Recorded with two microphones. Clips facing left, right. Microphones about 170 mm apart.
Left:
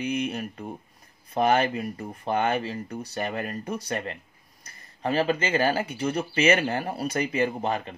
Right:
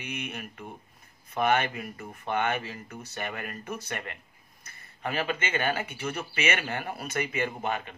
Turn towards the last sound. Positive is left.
turn(degrees=35)  # may be behind; listen again after turning